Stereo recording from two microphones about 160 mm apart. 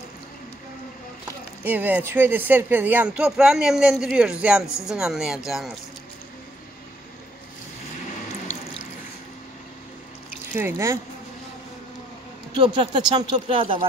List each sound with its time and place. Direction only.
1.6 s speech: 10° right (ahead or behind)
8.5 s water: 50° left (ahead or behind)
10.5 s speech: 15° right (ahead or behind)
12.5 s speech: 35° right (ahead or behind)